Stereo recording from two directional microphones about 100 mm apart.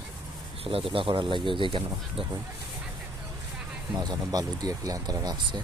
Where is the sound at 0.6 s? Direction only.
65° right (ahead or behind).